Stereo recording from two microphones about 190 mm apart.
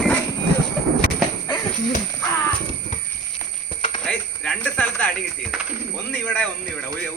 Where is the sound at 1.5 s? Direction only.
25° left (ahead or behind).